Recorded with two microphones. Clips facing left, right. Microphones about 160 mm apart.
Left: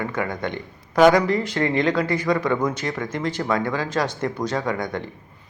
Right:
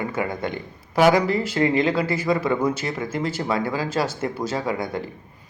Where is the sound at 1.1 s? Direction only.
30° right (ahead or behind).